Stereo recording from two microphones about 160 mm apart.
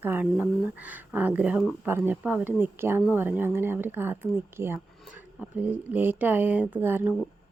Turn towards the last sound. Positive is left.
turn(degrees=-10)  # may be behind; listen again after turning